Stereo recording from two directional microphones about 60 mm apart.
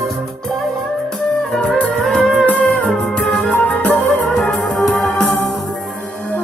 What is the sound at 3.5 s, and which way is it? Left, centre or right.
Music, left.